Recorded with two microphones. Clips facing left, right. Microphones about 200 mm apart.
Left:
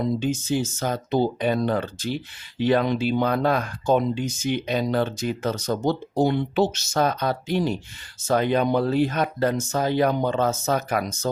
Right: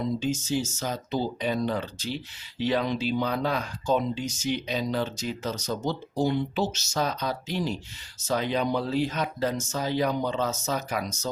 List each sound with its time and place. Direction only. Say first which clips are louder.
0.0 s speech: left 4 dB; 55° left (ahead or behind)